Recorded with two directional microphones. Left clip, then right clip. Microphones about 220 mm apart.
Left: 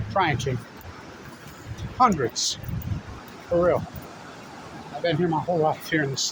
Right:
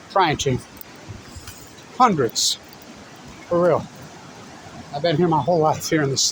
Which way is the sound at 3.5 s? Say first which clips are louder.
Right 3 dB; 40° right (ahead or behind).